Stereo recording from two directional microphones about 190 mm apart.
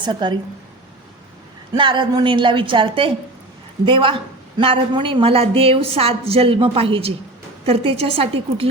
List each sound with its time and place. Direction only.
0.0 s a woman's voice: 25° right (ahead or behind)
1.7 s a woman's voice: 25° right (ahead or behind)